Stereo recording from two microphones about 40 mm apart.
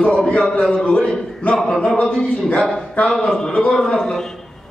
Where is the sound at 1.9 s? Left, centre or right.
Left.